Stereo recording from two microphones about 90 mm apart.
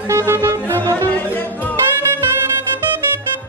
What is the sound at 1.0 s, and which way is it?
Music, 20° left (ahead or behind).